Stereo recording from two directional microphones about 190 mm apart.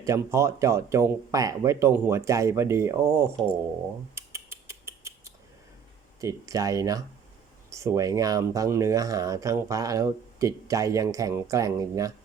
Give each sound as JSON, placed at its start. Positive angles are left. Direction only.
{"t": 0.0, "sound": "speech", "side_deg": -15}
{"t": 4.1, "sound": "mechanisms", "side_deg": -15}
{"t": 6.1, "sound": "speech", "side_deg": -15}